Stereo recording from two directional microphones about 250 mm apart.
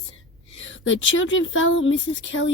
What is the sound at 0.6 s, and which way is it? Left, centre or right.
Speech, left.